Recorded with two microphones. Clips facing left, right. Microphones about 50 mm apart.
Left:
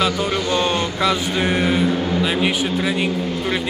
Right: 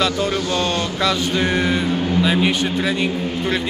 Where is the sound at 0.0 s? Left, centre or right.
Centre.